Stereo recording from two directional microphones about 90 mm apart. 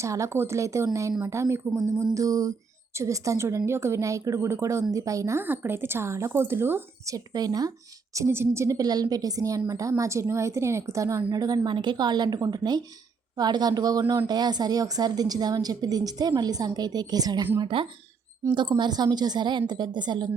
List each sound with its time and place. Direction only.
0.0 s a woman's voice: 35° right (ahead or behind)
7.0 s a woman's voice: 45° right (ahead or behind)
8.1 s speech: 30° right (ahead or behind)
8.8 s a woman's voice: 45° right (ahead or behind)
17.6 s speech: 80° right
18.5 s a woman's voice: 55° right (ahead or behind)